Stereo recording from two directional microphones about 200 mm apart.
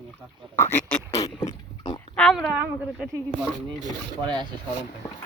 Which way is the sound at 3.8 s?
20° right (ahead or behind).